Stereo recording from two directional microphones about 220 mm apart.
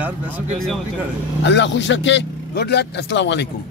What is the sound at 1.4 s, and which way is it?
A man's voice, 55° left (ahead or behind).